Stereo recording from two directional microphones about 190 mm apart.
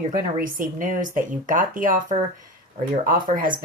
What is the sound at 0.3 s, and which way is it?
Speech, 45° right (ahead or behind).